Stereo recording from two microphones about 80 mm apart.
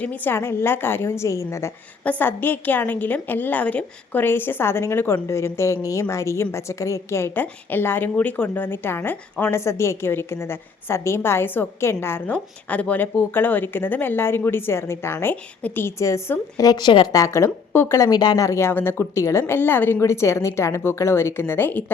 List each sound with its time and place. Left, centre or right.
0.0 s a woman's voice: centre
0.3 s a woman's voice: left
2.0 s a woman's voice: left
16.0 s a woman's voice: left
16.6 s speech: left
17.1 s a woman's voice: left
17.7 s a sound: left
17.9 s a woman's voice: left
18.2 s speech: left
18.4 s a woman's voice: left